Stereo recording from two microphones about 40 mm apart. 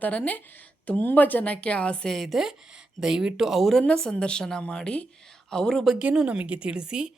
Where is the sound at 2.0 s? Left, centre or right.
Centre.